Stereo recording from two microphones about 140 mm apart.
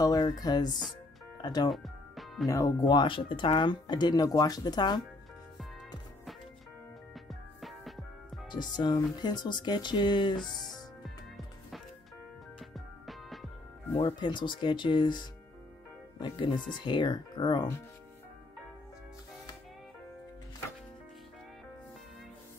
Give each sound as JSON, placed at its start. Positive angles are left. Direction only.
{"t": 0.0, "sound": "music", "side_deg": 25}
{"t": 1.4, "sound": "speech", "side_deg": 30}
{"t": 1.7, "sound": "music", "side_deg": 0}
{"t": 2.4, "sound": "speech", "side_deg": 25}
{"t": 7.2, "sound": "music", "side_deg": 0}
{"t": 8.5, "sound": "speech", "side_deg": 30}
{"t": 10.4, "sound": "speech", "side_deg": 5}
{"t": 12.5, "sound": "music", "side_deg": 0}
{"t": 13.9, "sound": "speech", "side_deg": 40}